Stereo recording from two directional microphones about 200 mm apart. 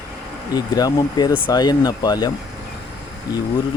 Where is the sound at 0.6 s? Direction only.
20° left (ahead or behind).